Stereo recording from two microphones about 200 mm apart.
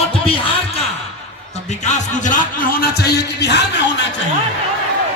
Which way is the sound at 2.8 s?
55° left (ahead or behind).